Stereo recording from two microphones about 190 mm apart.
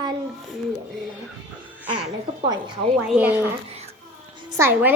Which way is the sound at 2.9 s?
Centre (ahead or behind).